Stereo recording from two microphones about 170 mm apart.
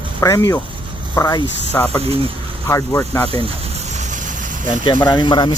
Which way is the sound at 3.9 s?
45° right (ahead or behind).